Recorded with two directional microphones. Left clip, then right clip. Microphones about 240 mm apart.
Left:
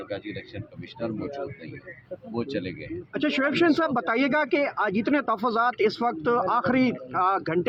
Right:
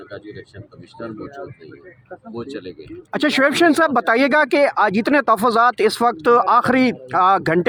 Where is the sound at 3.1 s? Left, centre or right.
Right.